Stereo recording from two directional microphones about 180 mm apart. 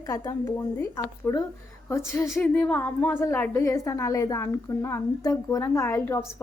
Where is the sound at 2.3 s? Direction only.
5° left (ahead or behind).